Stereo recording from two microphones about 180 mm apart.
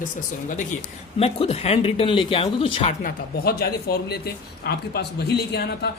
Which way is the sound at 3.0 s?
60° left (ahead or behind).